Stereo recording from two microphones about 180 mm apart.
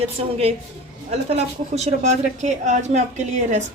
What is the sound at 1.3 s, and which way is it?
Speech, 35° right (ahead or behind).